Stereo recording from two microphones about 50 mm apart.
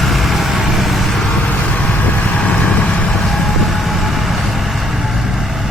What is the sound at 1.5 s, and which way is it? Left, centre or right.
Vehicle, left.